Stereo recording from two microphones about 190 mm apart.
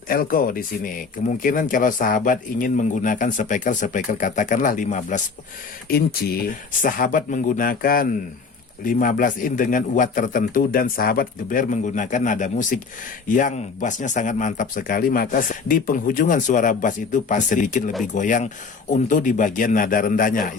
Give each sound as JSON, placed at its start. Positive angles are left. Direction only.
{"t": 0.1, "sound": "speech", "side_deg": 50}
{"t": 5.9, "sound": "speech", "side_deg": 55}